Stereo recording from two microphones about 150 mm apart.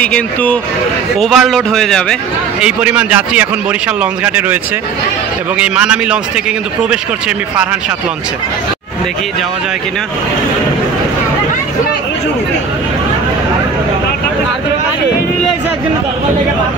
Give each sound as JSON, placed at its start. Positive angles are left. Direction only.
{"t": 0.0, "sound": "a man's voice", "side_deg": 10}
{"t": 2.6, "sound": "a man's voice", "side_deg": -10}
{"t": 5.6, "sound": "a man's voice", "side_deg": -10}